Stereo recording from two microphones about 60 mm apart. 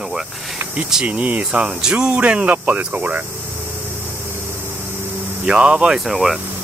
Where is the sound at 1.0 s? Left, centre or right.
Right.